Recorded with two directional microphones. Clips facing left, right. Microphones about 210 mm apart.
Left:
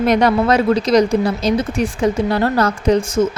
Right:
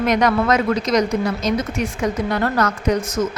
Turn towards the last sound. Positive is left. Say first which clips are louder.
# left 5 dB
turn(degrees=30)  # may be behind; listen again after turning